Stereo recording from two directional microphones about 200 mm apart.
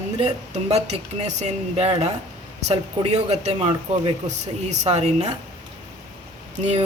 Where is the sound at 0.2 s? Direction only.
35° right (ahead or behind).